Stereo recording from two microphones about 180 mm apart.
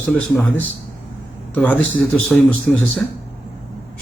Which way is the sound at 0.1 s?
10° left (ahead or behind).